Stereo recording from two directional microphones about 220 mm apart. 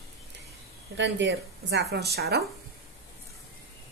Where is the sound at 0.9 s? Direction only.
55° right (ahead or behind).